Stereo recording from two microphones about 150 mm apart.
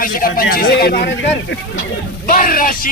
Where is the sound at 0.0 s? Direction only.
70° left (ahead or behind); by 1.0 s 90° left.